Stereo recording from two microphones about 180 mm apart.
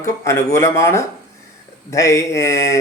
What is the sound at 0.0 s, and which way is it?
Speech, 15° left (ahead or behind).